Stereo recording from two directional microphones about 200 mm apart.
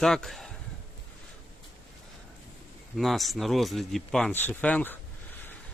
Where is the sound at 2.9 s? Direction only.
Centre (ahead or behind).